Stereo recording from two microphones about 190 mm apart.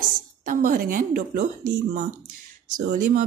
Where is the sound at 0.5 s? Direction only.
50° right (ahead or behind).